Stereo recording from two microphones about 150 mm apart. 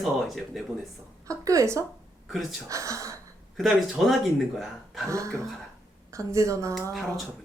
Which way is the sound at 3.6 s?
Centre (ahead or behind).